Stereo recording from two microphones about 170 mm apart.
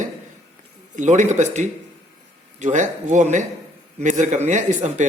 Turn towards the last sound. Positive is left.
turn(degrees=-45)  # may be behind; listen again after turning